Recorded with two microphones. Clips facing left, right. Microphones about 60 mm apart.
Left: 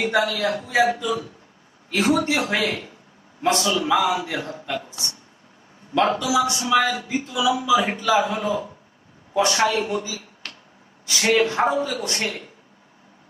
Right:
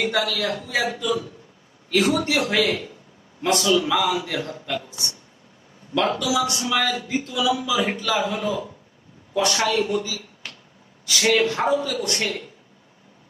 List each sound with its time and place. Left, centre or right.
0.0 s a man's voice: left